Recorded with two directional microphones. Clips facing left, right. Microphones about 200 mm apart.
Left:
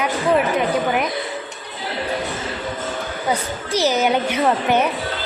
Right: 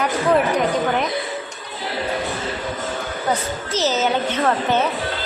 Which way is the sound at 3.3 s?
10° left (ahead or behind).